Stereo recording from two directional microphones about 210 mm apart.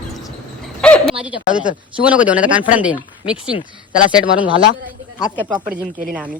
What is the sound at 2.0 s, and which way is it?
Speech, 5° right (ahead or behind).